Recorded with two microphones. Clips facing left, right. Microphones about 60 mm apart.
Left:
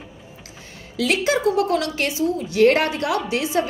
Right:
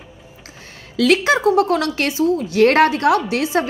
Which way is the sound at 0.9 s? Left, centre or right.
Right.